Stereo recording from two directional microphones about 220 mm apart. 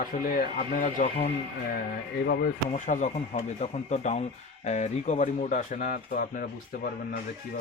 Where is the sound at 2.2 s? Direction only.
45° left (ahead or behind).